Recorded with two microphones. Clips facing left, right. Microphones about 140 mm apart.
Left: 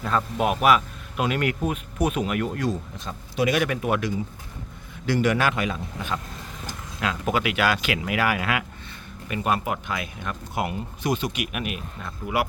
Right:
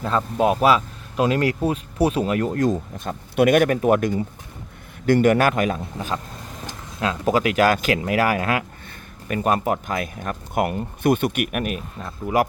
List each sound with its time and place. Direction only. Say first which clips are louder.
0.0 s a man's voice: right 4 dB; 30° right (ahead or behind)